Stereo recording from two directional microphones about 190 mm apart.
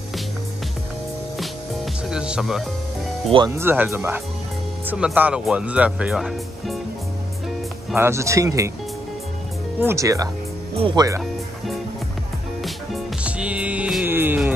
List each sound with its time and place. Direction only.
2.0 s music: 5° right (ahead or behind)
3.4 s speech: 10° right (ahead or behind)
7.9 s speech: 15° right (ahead or behind)
9.8 s speech: 15° right (ahead or behind)
12.6 s music: 5° right (ahead or behind)